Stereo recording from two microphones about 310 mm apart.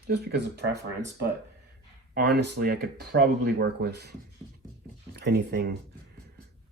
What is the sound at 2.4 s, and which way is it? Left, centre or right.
Speech, right.